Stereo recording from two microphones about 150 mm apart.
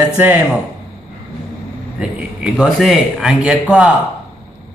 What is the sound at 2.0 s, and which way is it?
A man's voice, 5° right (ahead or behind).